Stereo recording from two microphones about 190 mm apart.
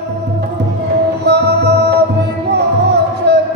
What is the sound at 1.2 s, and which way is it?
Music, 60° right (ahead or behind).